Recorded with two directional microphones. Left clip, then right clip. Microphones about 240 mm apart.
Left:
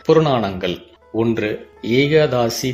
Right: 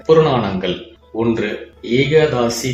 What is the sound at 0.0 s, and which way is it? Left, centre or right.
Speech, left.